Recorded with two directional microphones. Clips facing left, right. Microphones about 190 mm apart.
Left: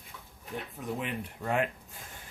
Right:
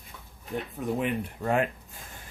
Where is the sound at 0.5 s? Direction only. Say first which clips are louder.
Right 6 dB; 55° right (ahead or behind).